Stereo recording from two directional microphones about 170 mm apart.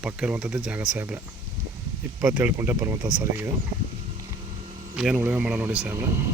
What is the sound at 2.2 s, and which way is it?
Speech, 10° right (ahead or behind).